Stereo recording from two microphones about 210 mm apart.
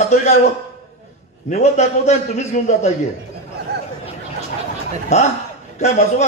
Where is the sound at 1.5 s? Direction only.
30° left (ahead or behind).